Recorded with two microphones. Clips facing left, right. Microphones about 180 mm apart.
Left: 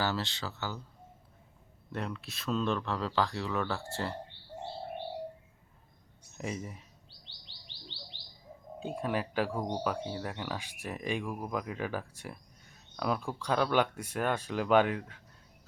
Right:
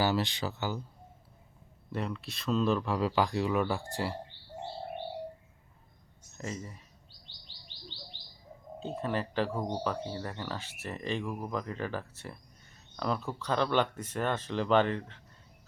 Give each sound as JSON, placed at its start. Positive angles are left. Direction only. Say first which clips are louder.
{"t": 0.0, "sound": "speech", "louder": "right 4 dB", "side_deg": -15}
{"t": 1.9, "sound": "speech", "louder": "right 2 dB", "side_deg": 0}
{"t": 6.3, "sound": "speech", "louder": "left 2 dB", "side_deg": 15}
{"t": 8.8, "sound": "speech", "louder": "even", "side_deg": 10}